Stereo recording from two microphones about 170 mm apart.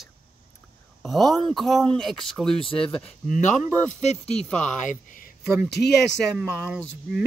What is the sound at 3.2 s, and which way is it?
Speech, 45° left (ahead or behind).